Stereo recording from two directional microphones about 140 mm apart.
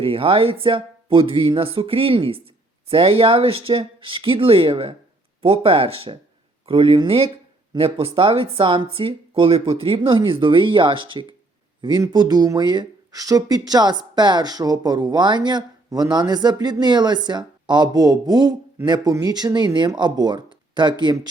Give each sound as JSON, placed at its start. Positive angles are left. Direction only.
{"t": 0.0, "sound": "speech", "side_deg": -40}